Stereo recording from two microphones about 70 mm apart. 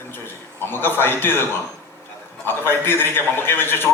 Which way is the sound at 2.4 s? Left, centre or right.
Left.